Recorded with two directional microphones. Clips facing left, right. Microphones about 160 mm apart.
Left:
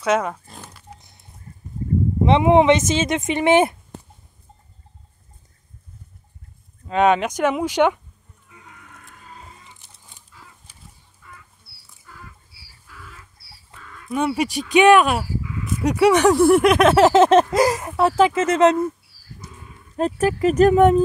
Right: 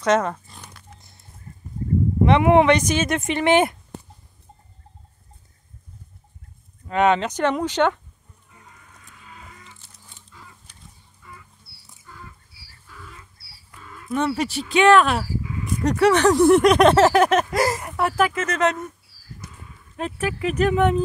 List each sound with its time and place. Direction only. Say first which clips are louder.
0.0 s speech: right 1 dB; 10° left (ahead or behind)
0.6 s pig: left 4 dB; 5° left (ahead or behind)
2.2 s speech: left 1 dB; 20° left (ahead or behind)
6.9 s speech: left 2 dB; 15° left (ahead or behind)
8.6 s music: left 5 dB; 70° left (ahead or behind)
9.2 s a sound: left 1 dB; 35° left (ahead or behind)
9.9 s chicken: even; 20° left (ahead or behind)
13.7 s a sound: even; 25° left (ahead or behind)
14.1 s speech: left 1 dB; 10° left (ahead or behind)
17.0 s speech: left 4 dB; 25° left (ahead or behind)
20.0 s speech: left 7 dB; 40° left (ahead or behind)